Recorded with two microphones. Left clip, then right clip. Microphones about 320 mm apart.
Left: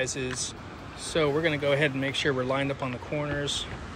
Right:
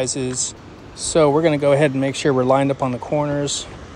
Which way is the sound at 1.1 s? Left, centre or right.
Centre.